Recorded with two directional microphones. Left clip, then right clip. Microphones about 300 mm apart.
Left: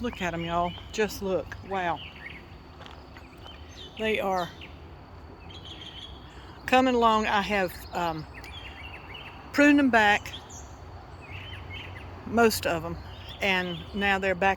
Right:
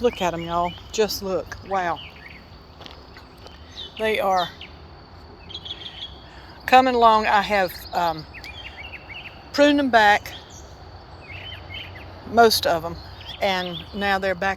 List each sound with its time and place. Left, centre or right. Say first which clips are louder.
0.0 s speech: right 9 dB; centre
3.9 s speech: right 6 dB; centre
6.7 s speech: right 7 dB; centre
12.3 s speech: right 7 dB; centre